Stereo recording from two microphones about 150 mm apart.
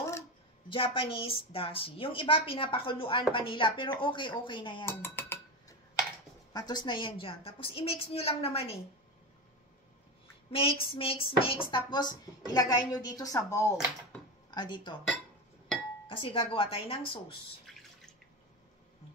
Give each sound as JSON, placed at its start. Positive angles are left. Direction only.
{"t": 0.7, "sound": "a woman's voice", "side_deg": 35}
{"t": 4.8, "sound": "dishes", "side_deg": 15}
{"t": 6.5, "sound": "a woman's voice", "side_deg": 30}
{"t": 10.5, "sound": "speech", "side_deg": 40}
{"t": 14.5, "sound": "a woman's voice", "side_deg": 30}
{"t": 16.1, "sound": "a woman's voice", "side_deg": 35}
{"t": 17.7, "sound": "drip", "side_deg": 0}